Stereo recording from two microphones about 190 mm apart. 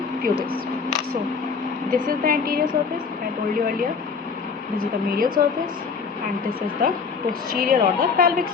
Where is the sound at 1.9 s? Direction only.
50° right (ahead or behind).